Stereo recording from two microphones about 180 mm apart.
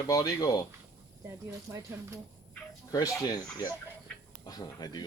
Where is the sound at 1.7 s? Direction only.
20° right (ahead or behind).